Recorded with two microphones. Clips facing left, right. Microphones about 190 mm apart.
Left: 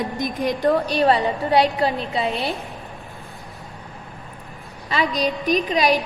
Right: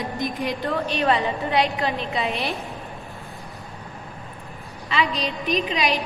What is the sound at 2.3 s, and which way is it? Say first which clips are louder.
Speech: left 2 dB; centre (ahead or behind).